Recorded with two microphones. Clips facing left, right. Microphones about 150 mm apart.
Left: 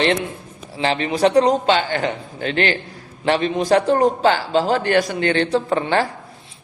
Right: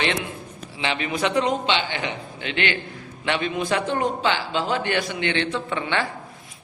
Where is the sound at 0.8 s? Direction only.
35° left (ahead or behind).